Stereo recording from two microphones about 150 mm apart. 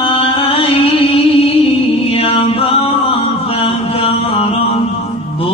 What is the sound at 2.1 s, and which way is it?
Chant, 40° left (ahead or behind).